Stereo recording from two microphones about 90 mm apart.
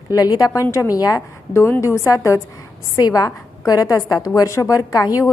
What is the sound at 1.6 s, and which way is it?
A woman's voice, 30° left (ahead or behind).